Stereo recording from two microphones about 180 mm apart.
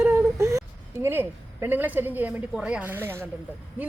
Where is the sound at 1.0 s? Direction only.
10° right (ahead or behind).